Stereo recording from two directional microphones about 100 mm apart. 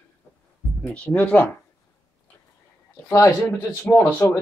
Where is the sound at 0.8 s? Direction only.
15° left (ahead or behind).